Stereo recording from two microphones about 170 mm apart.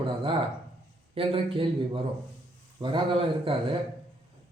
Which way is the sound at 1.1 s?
30° right (ahead or behind).